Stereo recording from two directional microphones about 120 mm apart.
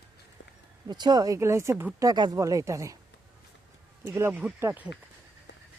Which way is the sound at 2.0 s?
35° right (ahead or behind).